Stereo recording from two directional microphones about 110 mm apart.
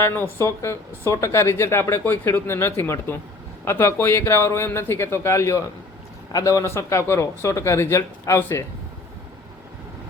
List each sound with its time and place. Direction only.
0.0 s speech: 20° left (ahead or behind)